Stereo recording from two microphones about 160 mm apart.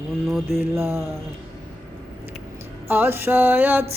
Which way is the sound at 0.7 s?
15° right (ahead or behind).